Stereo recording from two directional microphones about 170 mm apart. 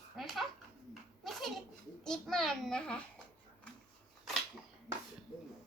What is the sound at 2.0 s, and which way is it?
A child's voice, 5° left (ahead or behind).